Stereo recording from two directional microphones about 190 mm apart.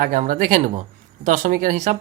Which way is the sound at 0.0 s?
45° right (ahead or behind).